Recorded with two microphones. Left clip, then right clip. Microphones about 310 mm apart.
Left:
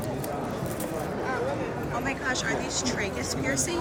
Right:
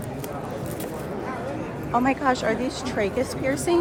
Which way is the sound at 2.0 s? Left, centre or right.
Centre.